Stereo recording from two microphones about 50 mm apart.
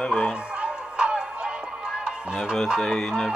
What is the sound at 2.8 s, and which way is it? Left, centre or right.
Speech, centre.